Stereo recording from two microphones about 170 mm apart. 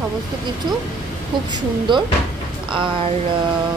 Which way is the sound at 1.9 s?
25° right (ahead or behind).